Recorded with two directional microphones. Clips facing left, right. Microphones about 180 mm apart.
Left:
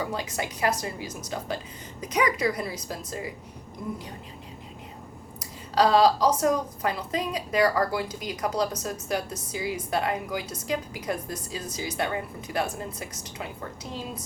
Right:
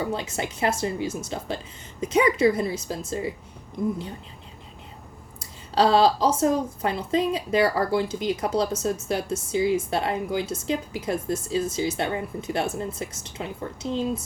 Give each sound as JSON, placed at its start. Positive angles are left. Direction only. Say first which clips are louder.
{"t": 0.0, "sound": "a woman's voice", "louder": "right 3 dB", "side_deg": -25}
{"t": 5.4, "sound": "a sound", "louder": "right 1 dB", "side_deg": -25}
{"t": 6.4, "sound": "a woman's voice", "louder": "right 2 dB", "side_deg": -25}